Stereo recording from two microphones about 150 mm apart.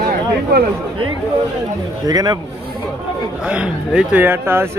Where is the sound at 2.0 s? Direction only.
25° right (ahead or behind).